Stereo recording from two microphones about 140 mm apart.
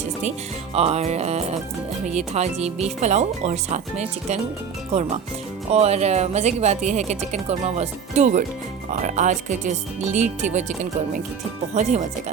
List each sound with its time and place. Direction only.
0.2 s speech: 50° right (ahead or behind)
5.7 s speech: 50° right (ahead or behind)
11.7 s speech: 55° right (ahead or behind)